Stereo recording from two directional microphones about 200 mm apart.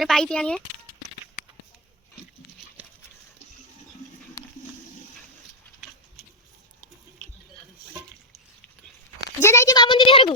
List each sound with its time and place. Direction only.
0.0 s speech: centre (ahead or behind)
9.4 s a woman's voice: 15° left (ahead or behind)